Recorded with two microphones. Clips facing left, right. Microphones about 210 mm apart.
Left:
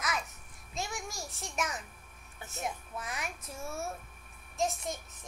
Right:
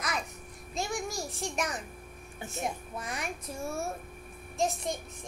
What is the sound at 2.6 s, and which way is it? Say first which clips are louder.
Speech: right 2 dB; 5° left (ahead or behind).